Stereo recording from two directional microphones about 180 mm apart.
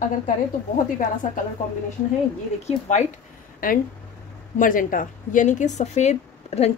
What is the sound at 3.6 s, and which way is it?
Speech, 50° left (ahead or behind).